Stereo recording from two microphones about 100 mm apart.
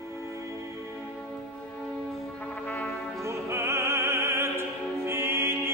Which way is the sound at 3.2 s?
25° right (ahead or behind).